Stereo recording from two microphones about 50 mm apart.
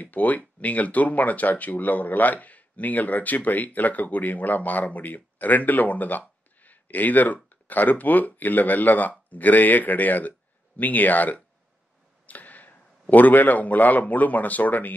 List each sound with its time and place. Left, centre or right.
0.0 s speech: left
12.3 s arrow: left
13.1 s speech: left